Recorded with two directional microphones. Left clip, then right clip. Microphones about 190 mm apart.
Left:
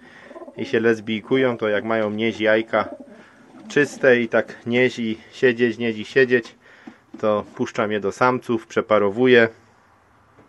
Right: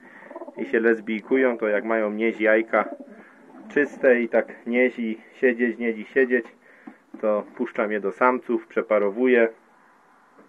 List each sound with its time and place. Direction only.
0.1 s speech: 25° left (ahead or behind)
3.6 s speech: 30° left (ahead or behind); by 9.5 s 50° left (ahead or behind)